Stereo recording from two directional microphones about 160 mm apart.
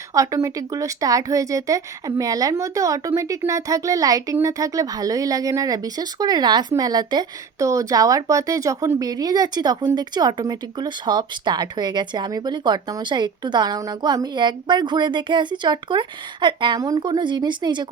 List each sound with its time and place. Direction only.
0.1 s speech: 20° right (ahead or behind)